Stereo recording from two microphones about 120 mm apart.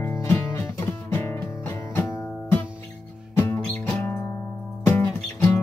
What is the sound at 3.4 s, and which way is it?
Music, 20° left (ahead or behind).